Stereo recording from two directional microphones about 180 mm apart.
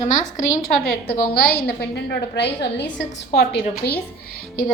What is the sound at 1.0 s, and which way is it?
A woman's voice, 60° left (ahead or behind).